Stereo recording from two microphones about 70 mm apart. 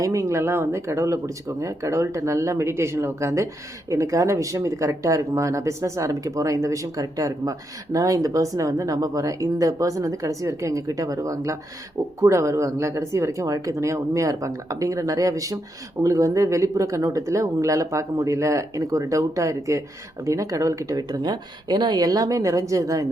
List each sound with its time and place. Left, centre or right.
0.0 s speech: right
21.1 s speech: right